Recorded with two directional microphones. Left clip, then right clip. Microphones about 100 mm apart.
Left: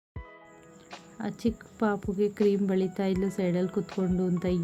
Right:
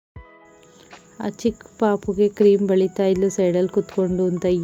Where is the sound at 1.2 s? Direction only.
50° right (ahead or behind).